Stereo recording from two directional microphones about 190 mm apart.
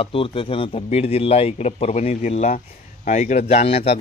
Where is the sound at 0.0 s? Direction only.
30° left (ahead or behind).